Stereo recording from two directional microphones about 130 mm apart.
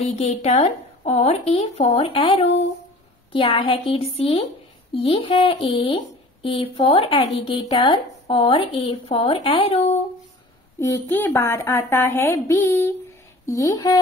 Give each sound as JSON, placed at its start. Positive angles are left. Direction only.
{"t": 0.0, "sound": "a woman's voice", "side_deg": 55}
{"t": 10.8, "sound": "a woman's voice", "side_deg": 20}